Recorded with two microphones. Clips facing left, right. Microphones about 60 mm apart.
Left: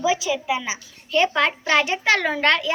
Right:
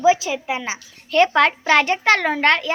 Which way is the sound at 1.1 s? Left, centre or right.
Right.